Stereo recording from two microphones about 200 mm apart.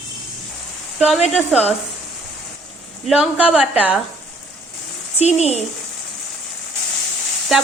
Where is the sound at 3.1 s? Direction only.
5° right (ahead or behind).